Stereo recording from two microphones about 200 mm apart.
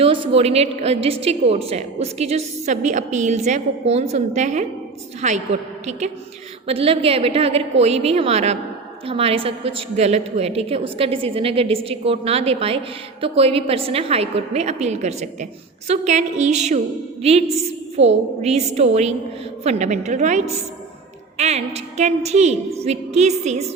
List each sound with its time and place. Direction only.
0.0 s a woman's voice: 25° right (ahead or behind)